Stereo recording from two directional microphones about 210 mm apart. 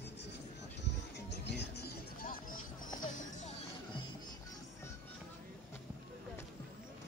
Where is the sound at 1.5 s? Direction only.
50° left (ahead or behind).